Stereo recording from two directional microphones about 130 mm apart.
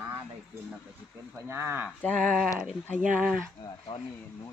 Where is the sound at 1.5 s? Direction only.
20° right (ahead or behind).